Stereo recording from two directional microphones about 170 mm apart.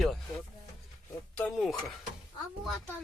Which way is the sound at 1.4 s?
5° left (ahead or behind).